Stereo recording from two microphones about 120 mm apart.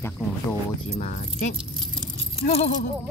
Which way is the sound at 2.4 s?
70° left (ahead or behind).